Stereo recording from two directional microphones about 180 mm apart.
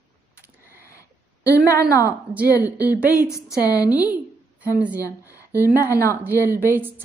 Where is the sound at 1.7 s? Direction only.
15° left (ahead or behind).